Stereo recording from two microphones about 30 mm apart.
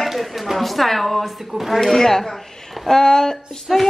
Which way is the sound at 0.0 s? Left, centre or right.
Centre.